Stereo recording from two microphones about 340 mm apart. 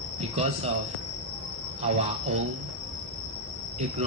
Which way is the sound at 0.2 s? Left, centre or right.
Centre.